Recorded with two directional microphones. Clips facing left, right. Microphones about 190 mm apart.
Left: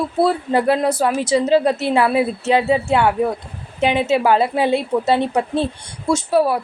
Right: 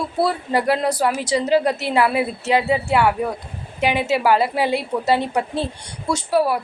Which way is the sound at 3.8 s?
20° left (ahead or behind).